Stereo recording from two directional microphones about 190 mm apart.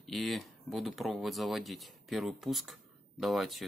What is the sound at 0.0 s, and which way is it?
Speech, centre (ahead or behind).